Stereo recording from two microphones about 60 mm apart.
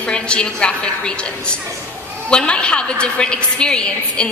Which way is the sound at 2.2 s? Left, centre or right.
Centre.